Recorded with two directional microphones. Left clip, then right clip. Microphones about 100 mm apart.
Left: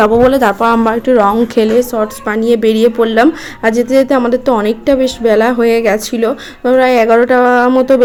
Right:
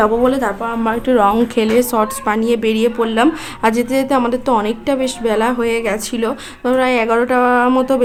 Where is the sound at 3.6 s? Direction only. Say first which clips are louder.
Left 3 dB; 15° left (ahead or behind).